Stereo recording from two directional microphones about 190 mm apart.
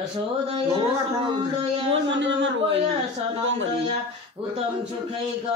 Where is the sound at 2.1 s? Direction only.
75° right (ahead or behind).